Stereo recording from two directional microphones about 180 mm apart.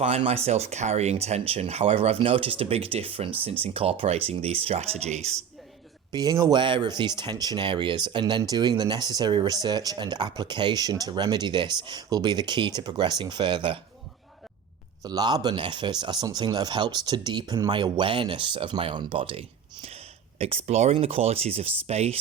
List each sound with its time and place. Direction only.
0.0 s speech: 35° right (ahead or behind)
6.1 s speech: 20° right (ahead or behind)
15.0 s speech: 20° right (ahead or behind)